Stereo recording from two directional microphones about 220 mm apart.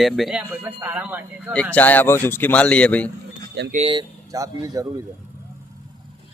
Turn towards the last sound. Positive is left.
turn(degrees=-15)  # may be behind; listen again after turning